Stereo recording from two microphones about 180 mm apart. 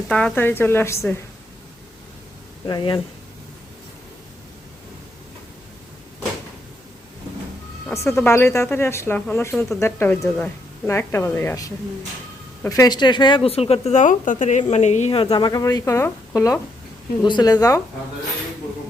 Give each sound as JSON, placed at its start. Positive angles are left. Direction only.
{"t": 0.1, "sound": "speech", "side_deg": 5}
{"t": 2.6, "sound": "speech", "side_deg": 25}
{"t": 8.0, "sound": "speech", "side_deg": 15}